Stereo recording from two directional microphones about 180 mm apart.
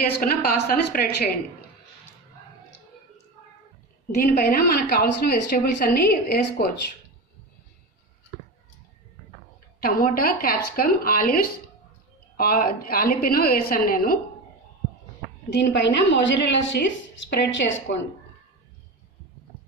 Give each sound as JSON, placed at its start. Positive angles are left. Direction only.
{"t": 0.1, "sound": "a woman's voice", "side_deg": 60}
{"t": 4.1, "sound": "a woman's voice", "side_deg": 60}
{"t": 9.8, "sound": "a woman's voice", "side_deg": 55}
{"t": 15.5, "sound": "a woman's voice", "side_deg": 75}